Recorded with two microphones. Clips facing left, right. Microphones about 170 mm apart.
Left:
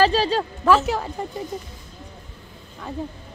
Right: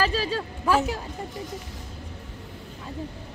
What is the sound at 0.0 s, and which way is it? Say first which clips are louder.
Speech: left 7 dB; 90° left.